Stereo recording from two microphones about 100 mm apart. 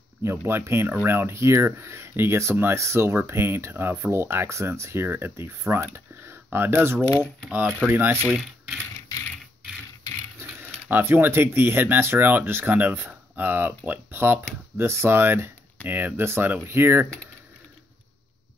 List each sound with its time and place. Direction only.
0.2 s speech: 25° right (ahead or behind)
8.4 s speech: centre (ahead or behind)
10.4 s speech: 20° right (ahead or behind)